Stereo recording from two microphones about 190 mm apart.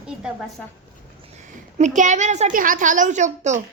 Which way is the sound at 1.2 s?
40° right (ahead or behind).